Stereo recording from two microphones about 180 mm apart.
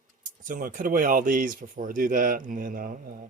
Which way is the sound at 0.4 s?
50° right (ahead or behind).